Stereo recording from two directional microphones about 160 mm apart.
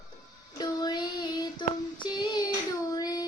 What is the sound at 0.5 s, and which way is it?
Child singing, 25° left (ahead or behind).